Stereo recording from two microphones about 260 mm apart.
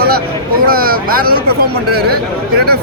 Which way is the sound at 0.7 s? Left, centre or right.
Right.